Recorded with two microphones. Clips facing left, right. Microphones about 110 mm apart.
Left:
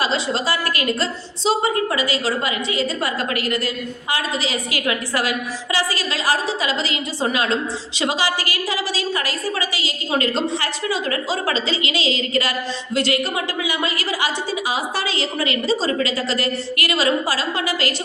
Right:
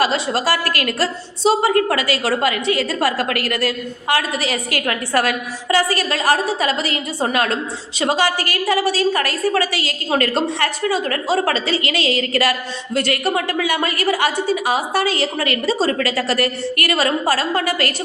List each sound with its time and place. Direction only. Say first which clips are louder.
0.0 s a woman's voice: right 3 dB; 55° right (ahead or behind)
4.1 s a woman's voice: right 4 dB; 55° right (ahead or behind)